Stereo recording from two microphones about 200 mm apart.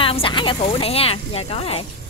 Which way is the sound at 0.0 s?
25° left (ahead or behind).